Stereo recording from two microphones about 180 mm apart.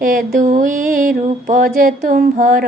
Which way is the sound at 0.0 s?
50° right (ahead or behind).